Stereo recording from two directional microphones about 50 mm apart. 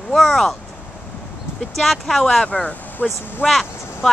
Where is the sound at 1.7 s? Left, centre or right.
Centre.